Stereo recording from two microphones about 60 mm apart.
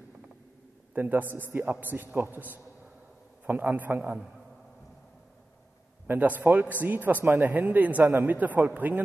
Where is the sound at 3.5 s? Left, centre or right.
Right.